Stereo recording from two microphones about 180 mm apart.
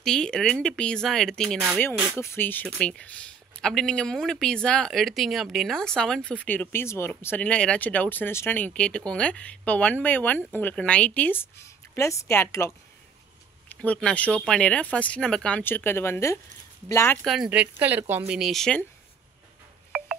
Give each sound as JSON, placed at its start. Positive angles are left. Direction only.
{"t": 0.0, "sound": "speech", "side_deg": 5}
{"t": 17.2, "sound": "speech", "side_deg": -5}
{"t": 18.3, "sound": "speech", "side_deg": 0}